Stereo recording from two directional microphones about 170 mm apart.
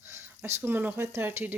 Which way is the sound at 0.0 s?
15° right (ahead or behind).